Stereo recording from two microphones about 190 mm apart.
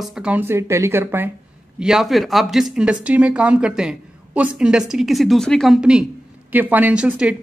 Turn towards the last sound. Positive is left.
turn(degrees=-5)  # may be behind; listen again after turning